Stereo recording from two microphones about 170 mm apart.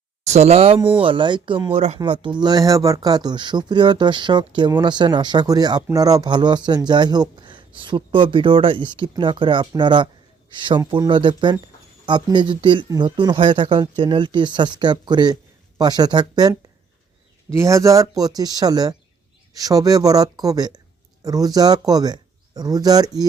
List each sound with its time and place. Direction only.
0.3 s speech: 40° right (ahead or behind)
2.0 s speech: 25° right (ahead or behind)